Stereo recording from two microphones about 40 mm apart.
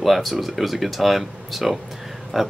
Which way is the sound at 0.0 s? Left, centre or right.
Centre.